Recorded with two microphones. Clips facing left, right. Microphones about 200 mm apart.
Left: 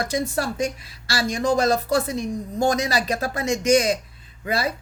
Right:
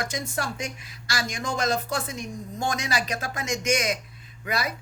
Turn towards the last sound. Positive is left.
turn(degrees=30)  # may be behind; listen again after turning